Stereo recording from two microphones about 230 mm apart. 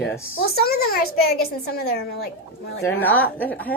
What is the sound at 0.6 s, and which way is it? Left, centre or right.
Speech, left.